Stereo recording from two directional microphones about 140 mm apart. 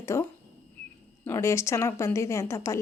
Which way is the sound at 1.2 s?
20° left (ahead or behind).